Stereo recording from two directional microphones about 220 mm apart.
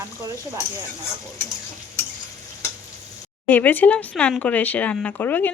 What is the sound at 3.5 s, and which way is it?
Speech, 10° left (ahead or behind).